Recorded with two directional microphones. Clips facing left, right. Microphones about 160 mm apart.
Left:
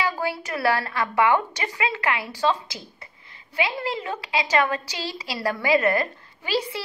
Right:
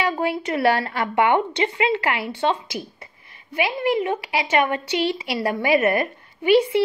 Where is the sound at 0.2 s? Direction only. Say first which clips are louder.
Right 5 dB; 25° right (ahead or behind).